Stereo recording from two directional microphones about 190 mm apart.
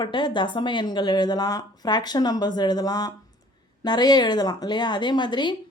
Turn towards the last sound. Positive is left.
turn(degrees=25)  # may be behind; listen again after turning